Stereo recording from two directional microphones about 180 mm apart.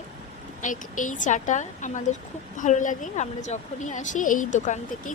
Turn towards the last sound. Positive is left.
turn(degrees=45)  # may be behind; listen again after turning